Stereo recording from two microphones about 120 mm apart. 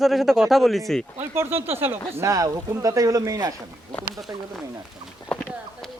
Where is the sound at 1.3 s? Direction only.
20° right (ahead or behind).